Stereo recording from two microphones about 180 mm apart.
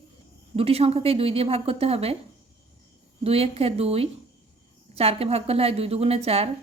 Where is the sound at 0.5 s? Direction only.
35° right (ahead or behind).